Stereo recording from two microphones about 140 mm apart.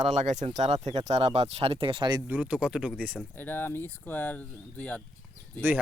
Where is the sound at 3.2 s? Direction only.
15° left (ahead or behind).